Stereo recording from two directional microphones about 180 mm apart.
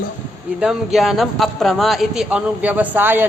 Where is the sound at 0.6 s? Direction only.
Centre (ahead or behind).